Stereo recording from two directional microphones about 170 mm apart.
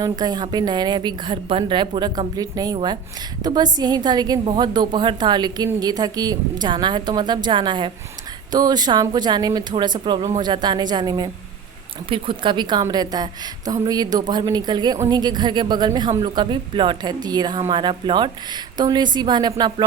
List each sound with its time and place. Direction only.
0.0 s a woman's voice: 25° right (ahead or behind)